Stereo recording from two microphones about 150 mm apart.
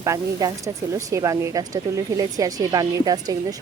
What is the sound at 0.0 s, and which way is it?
Speech, 20° right (ahead or behind).